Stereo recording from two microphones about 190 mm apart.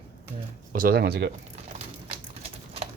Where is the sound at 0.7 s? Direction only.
50° right (ahead or behind).